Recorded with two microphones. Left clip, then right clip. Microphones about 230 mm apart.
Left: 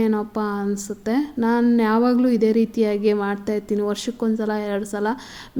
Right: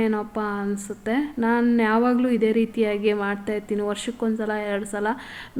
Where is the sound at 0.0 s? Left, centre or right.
Left.